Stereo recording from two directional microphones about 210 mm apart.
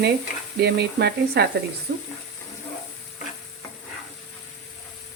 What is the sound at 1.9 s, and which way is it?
Frying, 55° right (ahead or behind).